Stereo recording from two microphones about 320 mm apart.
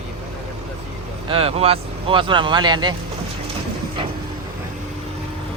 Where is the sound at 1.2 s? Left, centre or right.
Centre.